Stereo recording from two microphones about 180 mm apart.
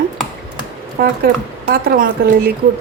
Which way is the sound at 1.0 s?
55° right (ahead or behind).